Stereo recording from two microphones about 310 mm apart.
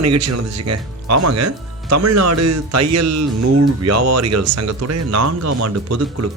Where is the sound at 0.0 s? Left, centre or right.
Right.